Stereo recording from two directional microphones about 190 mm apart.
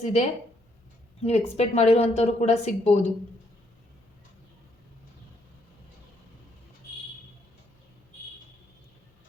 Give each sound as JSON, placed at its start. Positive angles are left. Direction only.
{"t": 0.0, "sound": "speech", "side_deg": 40}